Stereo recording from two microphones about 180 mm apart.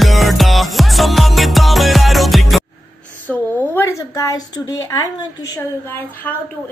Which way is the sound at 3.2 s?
10° left (ahead or behind).